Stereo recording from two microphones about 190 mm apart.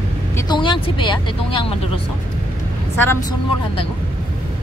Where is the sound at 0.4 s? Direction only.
25° left (ahead or behind).